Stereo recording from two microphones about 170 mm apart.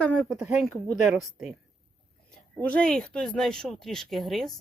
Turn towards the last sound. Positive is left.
turn(degrees=0)  # may be behind; listen again after turning